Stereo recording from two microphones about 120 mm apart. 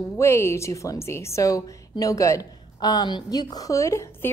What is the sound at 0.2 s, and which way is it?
A woman's voice, 20° left (ahead or behind).